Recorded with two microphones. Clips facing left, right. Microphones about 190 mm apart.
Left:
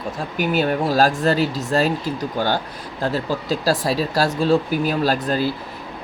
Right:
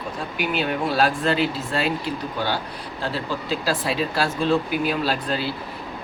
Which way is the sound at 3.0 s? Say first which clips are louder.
Left 5 dB; 40° left (ahead or behind).